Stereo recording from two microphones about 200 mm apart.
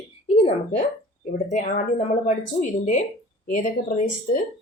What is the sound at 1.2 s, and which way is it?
Speech, 40° left (ahead or behind).